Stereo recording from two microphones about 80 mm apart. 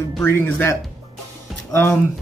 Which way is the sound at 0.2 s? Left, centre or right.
Left.